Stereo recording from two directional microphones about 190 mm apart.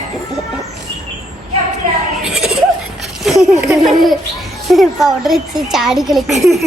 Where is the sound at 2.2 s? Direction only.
Centre (ahead or behind).